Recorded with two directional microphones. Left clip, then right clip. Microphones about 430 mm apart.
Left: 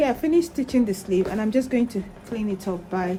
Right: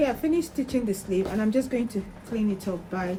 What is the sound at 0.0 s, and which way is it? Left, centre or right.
Speech, centre.